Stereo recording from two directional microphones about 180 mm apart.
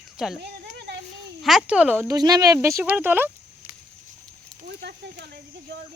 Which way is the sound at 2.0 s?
20° right (ahead or behind).